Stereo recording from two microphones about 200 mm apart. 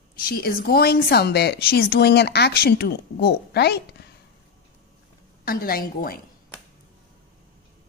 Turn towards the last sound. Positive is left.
turn(degrees=45)  # may be behind; listen again after turning